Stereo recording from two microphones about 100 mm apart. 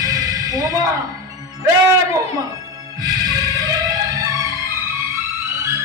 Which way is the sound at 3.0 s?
40° right (ahead or behind).